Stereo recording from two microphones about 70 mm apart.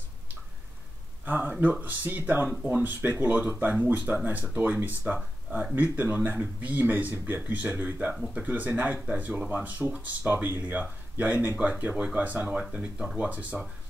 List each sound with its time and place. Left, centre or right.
1.2 s speech: right
8.1 s speech: centre
8.5 s speech: right